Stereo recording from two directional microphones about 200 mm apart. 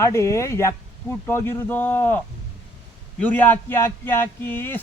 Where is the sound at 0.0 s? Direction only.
15° left (ahead or behind).